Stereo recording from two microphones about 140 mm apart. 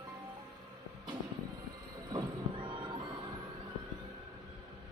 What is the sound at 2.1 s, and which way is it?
Horse, 35° right (ahead or behind).